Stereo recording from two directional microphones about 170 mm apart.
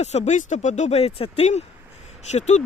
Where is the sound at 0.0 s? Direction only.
40° left (ahead or behind).